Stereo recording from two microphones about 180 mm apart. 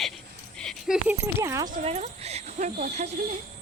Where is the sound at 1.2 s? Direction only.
15° right (ahead or behind).